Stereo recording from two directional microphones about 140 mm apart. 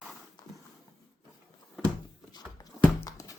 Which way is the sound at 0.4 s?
25° left (ahead or behind).